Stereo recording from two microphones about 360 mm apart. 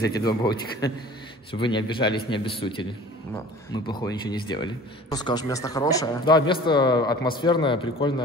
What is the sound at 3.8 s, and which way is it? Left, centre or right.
A man's voice, centre.